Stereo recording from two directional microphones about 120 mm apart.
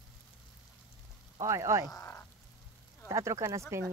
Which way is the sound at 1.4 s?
25° right (ahead or behind).